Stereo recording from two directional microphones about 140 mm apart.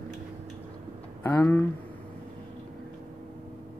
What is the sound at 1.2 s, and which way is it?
Speech, 10° left (ahead or behind).